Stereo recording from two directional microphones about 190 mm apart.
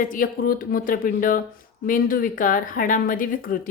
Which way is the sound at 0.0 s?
45° left (ahead or behind).